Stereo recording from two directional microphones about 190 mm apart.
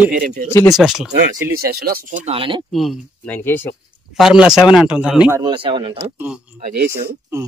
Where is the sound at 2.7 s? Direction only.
Centre (ahead or behind).